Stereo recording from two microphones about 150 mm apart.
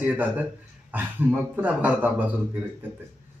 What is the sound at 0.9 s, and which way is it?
A man's voice, 15° right (ahead or behind).